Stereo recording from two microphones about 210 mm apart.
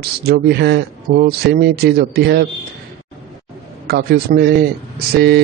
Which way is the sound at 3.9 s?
50° right (ahead or behind).